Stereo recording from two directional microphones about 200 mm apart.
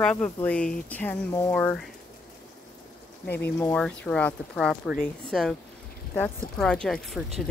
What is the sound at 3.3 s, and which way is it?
Speech, 10° left (ahead or behind).